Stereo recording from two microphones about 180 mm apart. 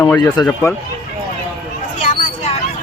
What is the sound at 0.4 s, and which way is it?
Speech, 25° left (ahead or behind).